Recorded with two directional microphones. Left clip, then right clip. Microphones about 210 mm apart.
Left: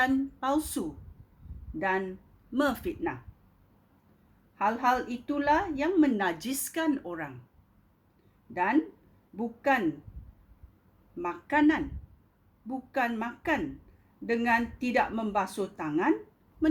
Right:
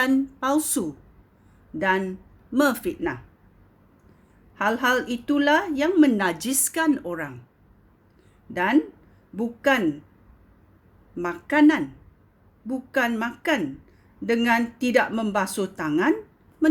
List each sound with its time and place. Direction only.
0.0 s a woman's voice: 35° right (ahead or behind)
4.5 s a woman's voice: 45° right (ahead or behind)
8.5 s a woman's voice: 40° right (ahead or behind)
11.2 s a woman's voice: 40° right (ahead or behind)